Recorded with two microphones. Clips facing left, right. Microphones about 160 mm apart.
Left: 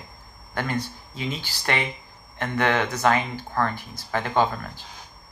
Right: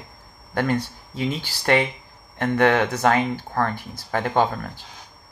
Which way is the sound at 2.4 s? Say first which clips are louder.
Right 5 dB; 60° right (ahead or behind).